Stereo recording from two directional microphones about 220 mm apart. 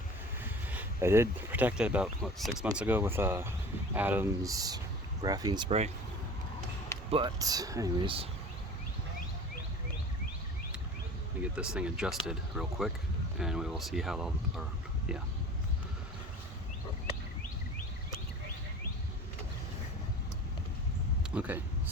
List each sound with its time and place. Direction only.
0.4 s speech: 10° right (ahead or behind); by 5.9 s 25° right (ahead or behind)
7.1 s speech: 20° right (ahead or behind)
11.5 s speech: 5° right (ahead or behind)
21.3 s speech: 5° right (ahead or behind)